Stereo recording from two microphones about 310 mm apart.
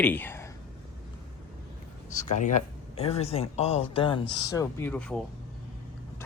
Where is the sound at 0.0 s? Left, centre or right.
Centre.